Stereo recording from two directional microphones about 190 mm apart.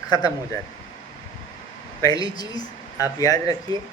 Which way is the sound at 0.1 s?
20° left (ahead or behind).